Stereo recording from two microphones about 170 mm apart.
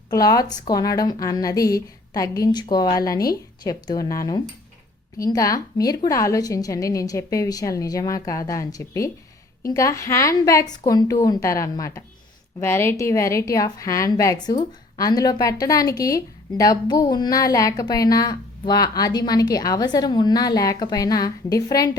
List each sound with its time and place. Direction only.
0.1 s a woman's voice: 20° left (ahead or behind)